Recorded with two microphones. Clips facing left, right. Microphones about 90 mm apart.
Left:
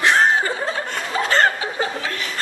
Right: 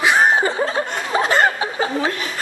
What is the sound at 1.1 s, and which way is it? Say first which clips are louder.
Chuckle: right 1 dB; 15° right (ahead or behind).